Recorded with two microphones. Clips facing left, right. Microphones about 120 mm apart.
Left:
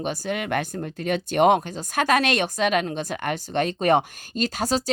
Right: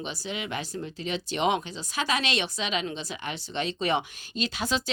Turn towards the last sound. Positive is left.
turn(degrees=40)  # may be behind; listen again after turning